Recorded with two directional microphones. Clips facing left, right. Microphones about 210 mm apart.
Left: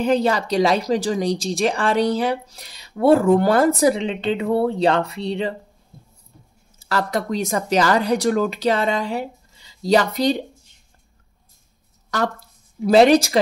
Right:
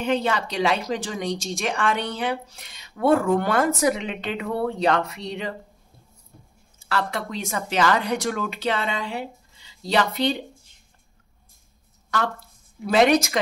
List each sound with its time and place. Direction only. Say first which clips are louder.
0.0 s speech: left 5 dB; 35° left (ahead or behind)
6.8 s speech: left 4 dB; 40° left (ahead or behind)
12.8 s speech: left 5 dB; 35° left (ahead or behind)